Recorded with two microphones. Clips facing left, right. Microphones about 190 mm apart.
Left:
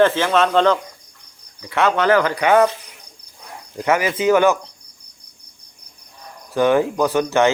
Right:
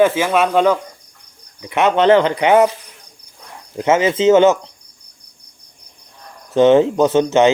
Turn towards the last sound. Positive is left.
turn(degrees=-20)  # may be behind; listen again after turning